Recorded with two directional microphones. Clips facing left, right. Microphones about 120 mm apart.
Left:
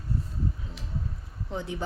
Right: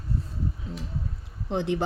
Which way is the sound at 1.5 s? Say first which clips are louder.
Right 7 dB; 80° right.